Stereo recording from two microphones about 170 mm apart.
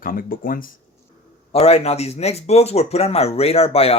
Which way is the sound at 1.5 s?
35° left (ahead or behind).